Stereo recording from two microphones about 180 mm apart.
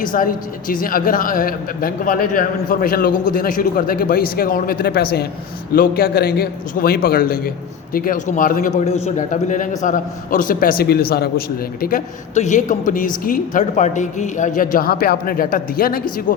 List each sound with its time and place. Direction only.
0.0 s a man's voice: 50° left (ahead or behind)